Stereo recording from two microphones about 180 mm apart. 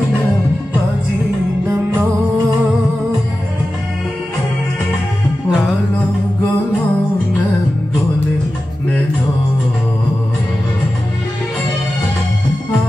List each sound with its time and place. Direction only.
5.5 s music: 5° right (ahead or behind)